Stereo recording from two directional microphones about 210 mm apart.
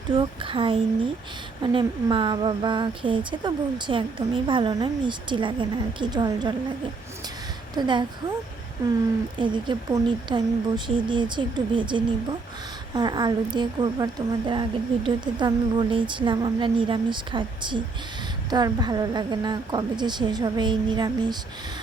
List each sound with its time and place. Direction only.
0.1 s a woman's voice: 25° right (ahead or behind)
7.8 s a woman's voice: 20° right (ahead or behind)
9.4 s a woman's voice: 20° right (ahead or behind)